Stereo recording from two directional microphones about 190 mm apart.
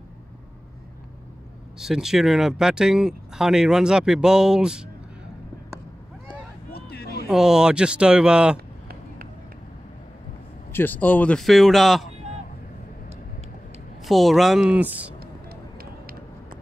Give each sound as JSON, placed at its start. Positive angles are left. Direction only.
{"t": 1.8, "sound": "speech", "side_deg": 0}
{"t": 6.7, "sound": "a sound", "side_deg": 55}
{"t": 7.2, "sound": "speech", "side_deg": -5}
{"t": 10.7, "sound": "speech", "side_deg": 10}
{"t": 14.0, "sound": "speech", "side_deg": 0}